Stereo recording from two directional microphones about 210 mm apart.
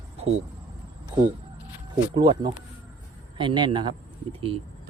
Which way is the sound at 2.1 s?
20° right (ahead or behind).